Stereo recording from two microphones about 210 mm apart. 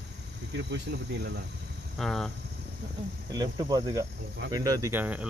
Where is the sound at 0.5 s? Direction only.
55° right (ahead or behind).